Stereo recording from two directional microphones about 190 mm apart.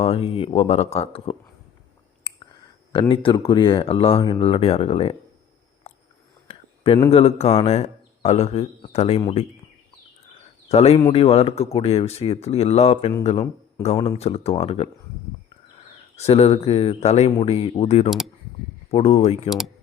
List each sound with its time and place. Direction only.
0.0 s a man's voice: 30° left (ahead or behind)
2.9 s speech: 25° left (ahead or behind)
5.9 s a sound: 35° left (ahead or behind)
7.1 s a man's voice: 30° left (ahead or behind)
10.7 s a man's voice: 35° left (ahead or behind)
16.1 s a man's voice: 35° left (ahead or behind)